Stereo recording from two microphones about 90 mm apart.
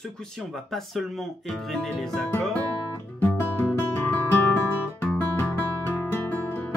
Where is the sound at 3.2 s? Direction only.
20° left (ahead or behind).